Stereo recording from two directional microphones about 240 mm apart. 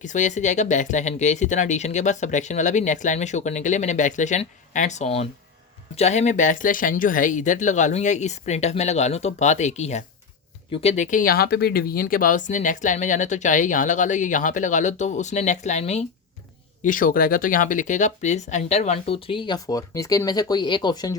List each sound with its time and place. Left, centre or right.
0.0 s speech: left; by 21.2 s centre